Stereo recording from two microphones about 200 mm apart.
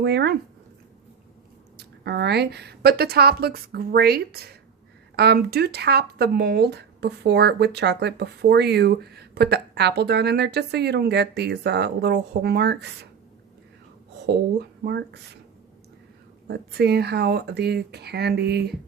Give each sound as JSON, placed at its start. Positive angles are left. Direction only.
{"t": 0.0, "sound": "speech", "side_deg": -55}
{"t": 1.8, "sound": "a woman's voice", "side_deg": -55}
{"t": 14.8, "sound": "speech", "side_deg": -55}
{"t": 16.5, "sound": "speech", "side_deg": -55}